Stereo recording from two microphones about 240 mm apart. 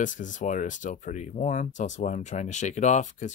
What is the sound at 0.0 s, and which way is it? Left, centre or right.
Speech, left.